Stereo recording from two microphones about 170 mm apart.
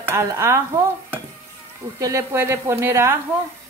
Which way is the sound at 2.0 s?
15° right (ahead or behind).